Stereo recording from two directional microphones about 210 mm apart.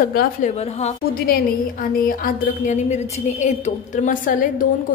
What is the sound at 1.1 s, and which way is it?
A woman's voice, 45° left (ahead or behind).